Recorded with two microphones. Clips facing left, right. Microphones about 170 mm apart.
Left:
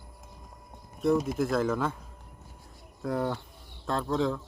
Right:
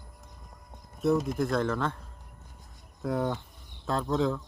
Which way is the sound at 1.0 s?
Centre (ahead or behind).